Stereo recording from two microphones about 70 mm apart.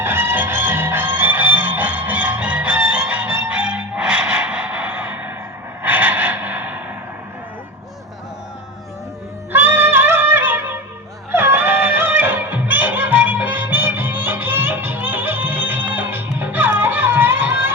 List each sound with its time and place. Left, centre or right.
0.0 s music: right
5.8 s a sound: right
9.5 s music: right